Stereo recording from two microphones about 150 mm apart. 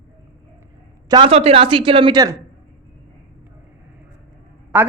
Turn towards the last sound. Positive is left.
turn(degrees=-10)  # may be behind; listen again after turning